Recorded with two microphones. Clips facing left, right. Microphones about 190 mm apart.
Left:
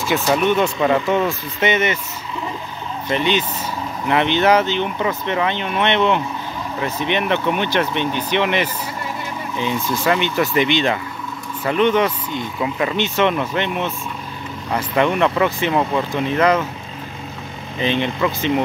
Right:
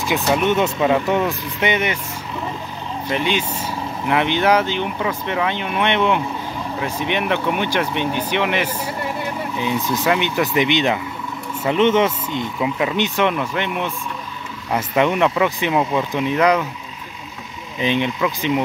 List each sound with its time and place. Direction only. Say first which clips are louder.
0.4 s speech: left 1 dB; 20° right (ahead or behind)
0.7 s speech: even; 5° right (ahead or behind)
3.1 s speech: left 2 dB; 10° right (ahead or behind)
12.5 s speech: even; 10° right (ahead or behind)
13.3 s speech: left 1 dB; 5° right (ahead or behind)
15.0 s speech: even; 10° right (ahead or behind)
17.7 s speech: even; 10° right (ahead or behind)